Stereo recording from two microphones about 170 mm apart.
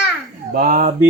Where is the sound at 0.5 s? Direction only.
60° right (ahead or behind).